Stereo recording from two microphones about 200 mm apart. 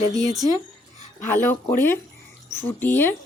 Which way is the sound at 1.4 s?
10° left (ahead or behind).